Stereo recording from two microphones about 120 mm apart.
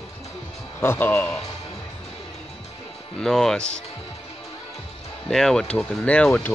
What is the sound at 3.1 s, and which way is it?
Speech, 5° left (ahead or behind).